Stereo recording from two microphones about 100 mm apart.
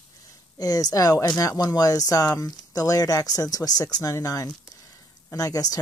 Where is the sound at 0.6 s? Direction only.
40° left (ahead or behind).